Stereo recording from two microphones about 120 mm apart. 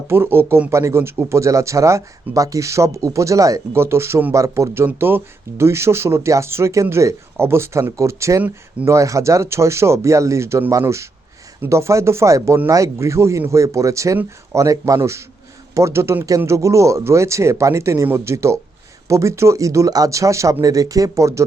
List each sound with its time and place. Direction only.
0.1 s speech: 20° right (ahead or behind)